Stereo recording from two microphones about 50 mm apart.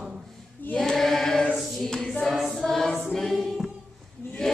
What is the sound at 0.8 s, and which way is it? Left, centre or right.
Choir, centre.